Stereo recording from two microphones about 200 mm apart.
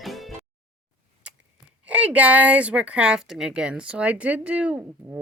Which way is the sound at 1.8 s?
5° right (ahead or behind).